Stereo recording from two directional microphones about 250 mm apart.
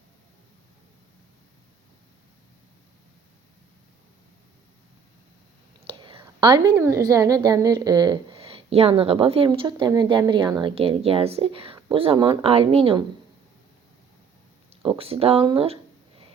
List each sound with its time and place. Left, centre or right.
5.9 s whispering: right
7.1 s a woman's voice: centre
14.8 s a sound: right